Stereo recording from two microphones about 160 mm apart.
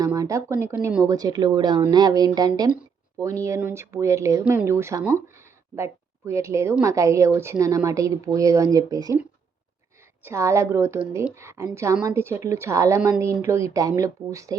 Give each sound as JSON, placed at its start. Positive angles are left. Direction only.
{"t": 0.0, "sound": "a sound", "side_deg": -20}
{"t": 0.6, "sound": "speech", "side_deg": -15}
{"t": 10.2, "sound": "speech", "side_deg": -15}